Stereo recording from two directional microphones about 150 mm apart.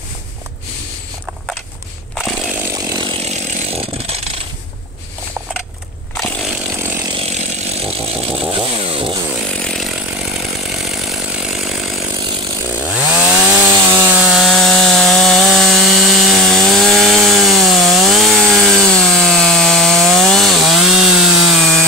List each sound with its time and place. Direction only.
2.1 s chainsaw: 5° right (ahead or behind)
2.7 s chainsaw: 25° right (ahead or behind)
3.1 s chainsaw: 50° right (ahead or behind)
6.1 s chainsaw: 10° left (ahead or behind)
6.4 s chainsaw: 5° right (ahead or behind)
7.2 s chainsaw: 45° right (ahead or behind)
9.3 s chainsaw: 5° left (ahead or behind)